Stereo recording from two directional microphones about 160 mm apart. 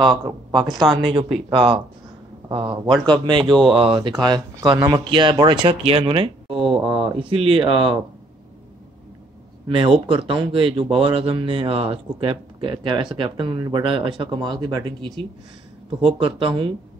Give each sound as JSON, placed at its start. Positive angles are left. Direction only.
{"t": 0.0, "sound": "speech", "side_deg": -25}
{"t": 4.1, "sound": "speech", "side_deg": -20}
{"t": 9.7, "sound": "speech", "side_deg": -35}